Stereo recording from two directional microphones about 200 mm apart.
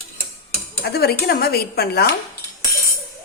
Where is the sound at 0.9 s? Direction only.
50° left (ahead or behind).